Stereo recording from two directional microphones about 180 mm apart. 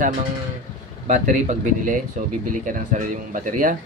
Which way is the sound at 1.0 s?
45° right (ahead or behind).